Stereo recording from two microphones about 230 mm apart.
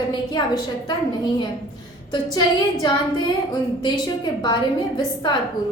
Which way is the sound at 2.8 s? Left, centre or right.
Centre.